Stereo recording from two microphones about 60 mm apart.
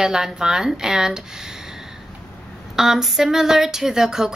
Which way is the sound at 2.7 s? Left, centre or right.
Centre.